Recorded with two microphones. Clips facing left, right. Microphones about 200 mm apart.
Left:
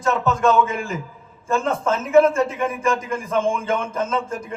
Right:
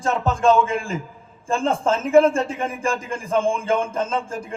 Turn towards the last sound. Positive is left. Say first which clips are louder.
# left 1 dB
turn(degrees=-30)  # may be behind; listen again after turning